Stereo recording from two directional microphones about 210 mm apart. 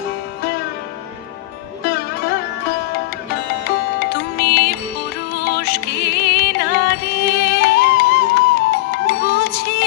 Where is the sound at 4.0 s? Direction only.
50° left (ahead or behind).